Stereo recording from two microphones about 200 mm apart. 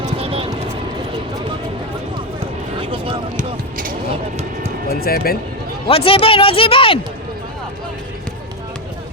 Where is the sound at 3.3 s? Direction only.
45° right (ahead or behind).